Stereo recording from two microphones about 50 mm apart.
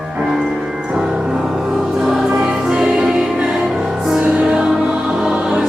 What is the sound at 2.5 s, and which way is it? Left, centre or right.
Music, centre.